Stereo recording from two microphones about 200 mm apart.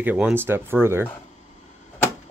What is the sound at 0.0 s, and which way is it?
Speech, 10° right (ahead or behind).